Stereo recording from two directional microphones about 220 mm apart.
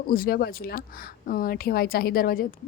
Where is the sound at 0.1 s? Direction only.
40° left (ahead or behind).